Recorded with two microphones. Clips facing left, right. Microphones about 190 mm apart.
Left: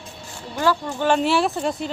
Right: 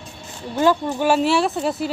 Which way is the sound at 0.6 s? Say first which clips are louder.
Right 4 dB; 20° right (ahead or behind).